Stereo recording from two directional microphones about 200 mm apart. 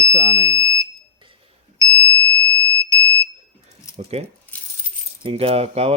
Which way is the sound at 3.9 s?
30° right (ahead or behind).